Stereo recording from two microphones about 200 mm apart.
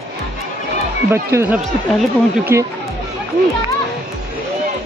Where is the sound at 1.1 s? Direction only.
15° right (ahead or behind).